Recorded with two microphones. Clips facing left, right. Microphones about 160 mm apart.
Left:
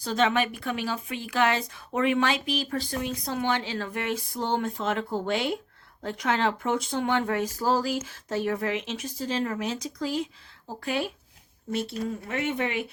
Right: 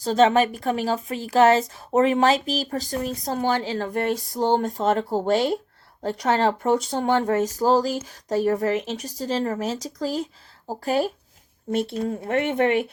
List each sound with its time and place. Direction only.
0.0 s a woman's voice: 35° right (ahead or behind)
11.7 s speech: 55° right (ahead or behind)